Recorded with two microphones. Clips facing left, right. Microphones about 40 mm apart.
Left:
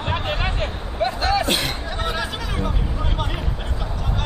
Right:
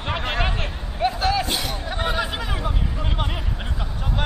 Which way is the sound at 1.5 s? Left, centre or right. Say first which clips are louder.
Left 4 dB; left.